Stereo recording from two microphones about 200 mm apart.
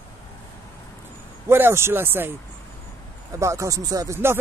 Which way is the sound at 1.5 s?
10° right (ahead or behind).